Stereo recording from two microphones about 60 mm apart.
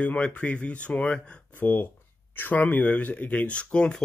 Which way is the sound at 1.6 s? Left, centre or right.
Left.